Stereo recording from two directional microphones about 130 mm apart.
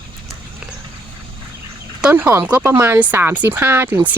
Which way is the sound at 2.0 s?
15° right (ahead or behind).